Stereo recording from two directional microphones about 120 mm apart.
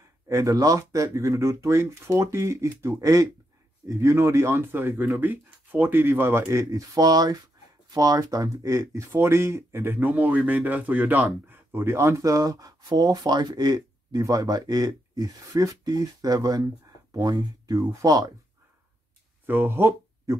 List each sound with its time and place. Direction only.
0.3 s speech: 25° right (ahead or behind)
19.4 s speech: 20° right (ahead or behind)